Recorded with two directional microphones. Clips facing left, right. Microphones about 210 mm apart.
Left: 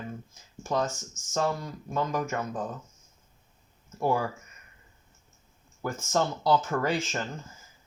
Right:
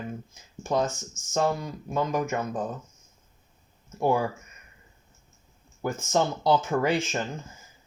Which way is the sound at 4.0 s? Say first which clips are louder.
Right 3 dB; 20° right (ahead or behind).